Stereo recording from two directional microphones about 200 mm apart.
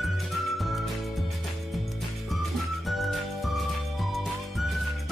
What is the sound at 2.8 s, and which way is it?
Music, centre (ahead or behind).